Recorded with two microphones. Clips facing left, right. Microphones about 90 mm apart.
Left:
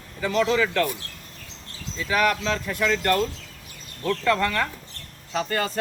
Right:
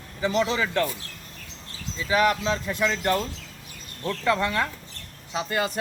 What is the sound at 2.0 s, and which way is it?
Speech, 20° right (ahead or behind).